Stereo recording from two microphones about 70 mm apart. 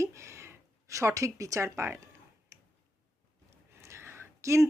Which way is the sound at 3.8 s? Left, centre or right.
Right.